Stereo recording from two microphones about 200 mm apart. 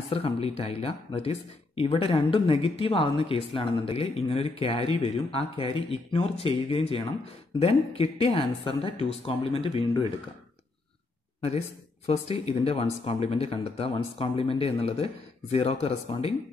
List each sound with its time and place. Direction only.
0.1 s speech: 30° left (ahead or behind)
12.3 s speech: 30° left (ahead or behind)